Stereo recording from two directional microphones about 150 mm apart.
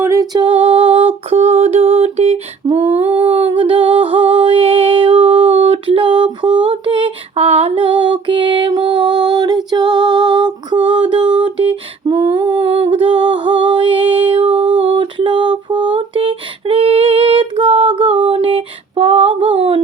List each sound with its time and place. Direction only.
0.0 s a capella: 20° right (ahead or behind)
1.3 s a sound: 45° right (ahead or behind)
3.2 s music: 35° right (ahead or behind)